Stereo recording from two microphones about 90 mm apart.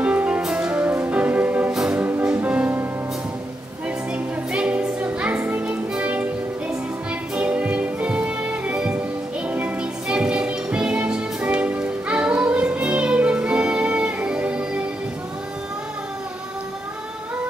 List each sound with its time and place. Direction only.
0.0 s music: 15° right (ahead or behind)
1.7 s music: 5° right (ahead or behind)
2.0 s music: 20° right (ahead or behind)
4.1 s music: 10° right (ahead or behind)
7.3 s music: 15° right (ahead or behind)